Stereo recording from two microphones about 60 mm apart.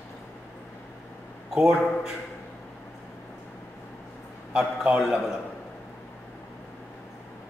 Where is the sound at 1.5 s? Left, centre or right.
Centre.